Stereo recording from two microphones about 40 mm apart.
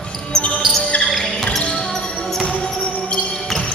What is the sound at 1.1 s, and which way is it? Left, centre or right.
Music, centre.